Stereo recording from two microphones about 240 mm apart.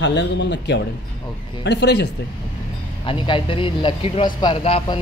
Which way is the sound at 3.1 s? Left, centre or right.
Left.